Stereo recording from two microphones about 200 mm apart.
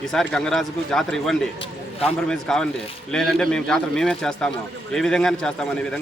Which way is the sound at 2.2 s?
5° left (ahead or behind).